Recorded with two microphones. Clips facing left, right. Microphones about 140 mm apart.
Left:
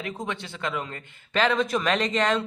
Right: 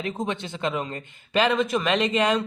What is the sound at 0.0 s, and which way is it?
A man's voice, 25° right (ahead or behind).